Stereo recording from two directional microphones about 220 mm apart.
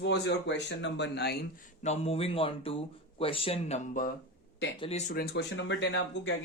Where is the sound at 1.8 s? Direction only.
30° left (ahead or behind).